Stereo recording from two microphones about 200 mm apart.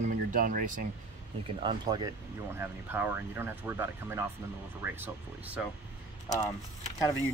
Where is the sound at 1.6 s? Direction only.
20° right (ahead or behind).